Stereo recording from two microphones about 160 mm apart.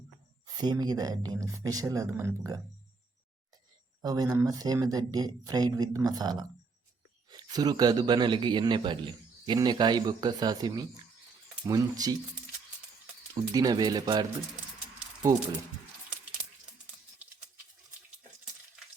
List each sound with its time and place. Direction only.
0.4 s speech: 25° right (ahead or behind)
4.0 s speech: 25° right (ahead or behind)
13.3 s speech: 25° right (ahead or behind)